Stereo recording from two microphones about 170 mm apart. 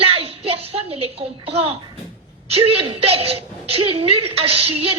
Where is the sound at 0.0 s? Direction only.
35° right (ahead or behind).